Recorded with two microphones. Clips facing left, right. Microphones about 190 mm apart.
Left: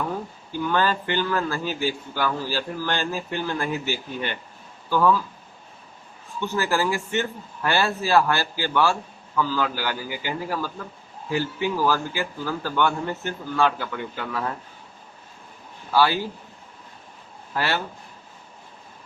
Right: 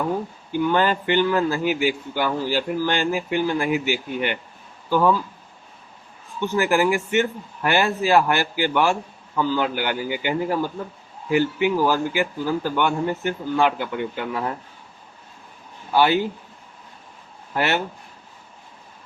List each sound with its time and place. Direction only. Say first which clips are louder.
0.5 s a man's voice: right 3 dB; 20° right (ahead or behind)
6.4 s a man's voice: right 4 dB; 15° right (ahead or behind)
15.9 s speech: right 2 dB; 20° right (ahead or behind)
17.5 s speech: right 3 dB; 20° right (ahead or behind)